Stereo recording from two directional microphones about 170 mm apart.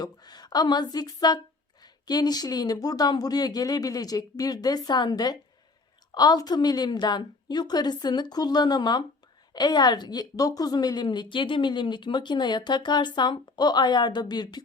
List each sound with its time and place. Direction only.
0.0 s a woman's voice: 25° left (ahead or behind)